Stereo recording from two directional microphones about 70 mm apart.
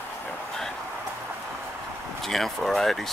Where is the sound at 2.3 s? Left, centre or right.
Centre.